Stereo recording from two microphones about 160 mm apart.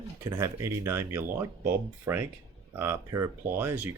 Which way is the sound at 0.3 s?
20° right (ahead or behind).